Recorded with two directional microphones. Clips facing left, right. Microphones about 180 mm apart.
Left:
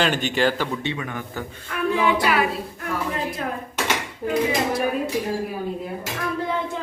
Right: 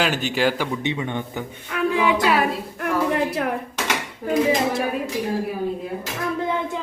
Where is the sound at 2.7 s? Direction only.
70° right (ahead or behind).